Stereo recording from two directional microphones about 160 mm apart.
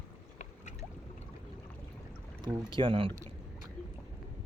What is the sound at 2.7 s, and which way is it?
Speech, 35° right (ahead or behind).